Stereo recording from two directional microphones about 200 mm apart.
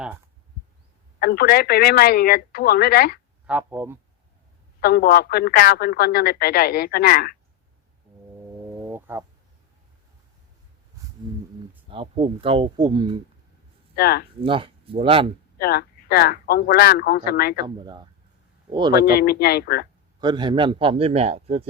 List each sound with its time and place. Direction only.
1.2 s speech: 50° left (ahead or behind)
3.4 s speech: 10° right (ahead or behind)
4.8 s speech: 50° left (ahead or behind)
8.7 s a sound: 10° right (ahead or behind)
11.0 s a sound: 15° right (ahead or behind)
11.9 s speech: 30° right (ahead or behind)
13.9 s speech: 50° left (ahead or behind)
14.4 s speech: 25° right (ahead or behind)
15.5 s speech: 50° left (ahead or behind)
17.7 s speech: 20° right (ahead or behind)
18.9 s speech: 50° left (ahead or behind)
20.2 s speech: 20° right (ahead or behind)